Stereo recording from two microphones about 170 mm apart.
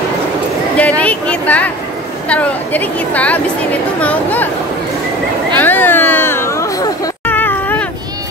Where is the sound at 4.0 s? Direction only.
10° left (ahead or behind).